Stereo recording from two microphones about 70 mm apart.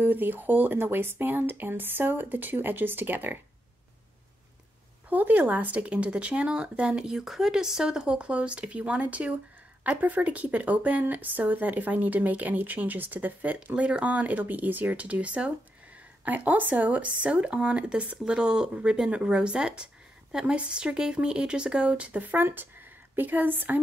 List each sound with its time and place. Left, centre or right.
0.0 s speech: right
5.1 s speech: right